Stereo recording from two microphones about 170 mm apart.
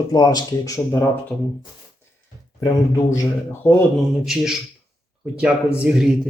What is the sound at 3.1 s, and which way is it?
Speech, 15° left (ahead or behind).